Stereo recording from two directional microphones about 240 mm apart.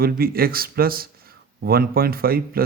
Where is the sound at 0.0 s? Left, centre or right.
Right.